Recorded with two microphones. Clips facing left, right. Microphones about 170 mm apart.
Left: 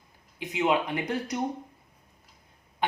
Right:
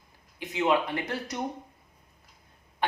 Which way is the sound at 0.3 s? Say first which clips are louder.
Even; 15° left (ahead or behind).